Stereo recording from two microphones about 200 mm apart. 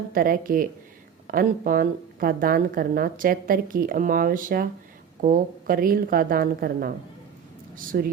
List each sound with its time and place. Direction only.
0.1 s speech: 45° right (ahead or behind)
7.9 s speech: 50° right (ahead or behind)